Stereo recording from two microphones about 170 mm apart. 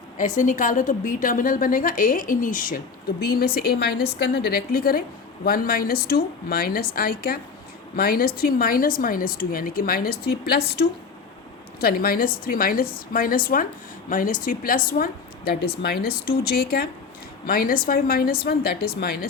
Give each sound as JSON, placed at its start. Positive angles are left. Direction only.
{"t": 0.2, "sound": "a woman's voice", "side_deg": 50}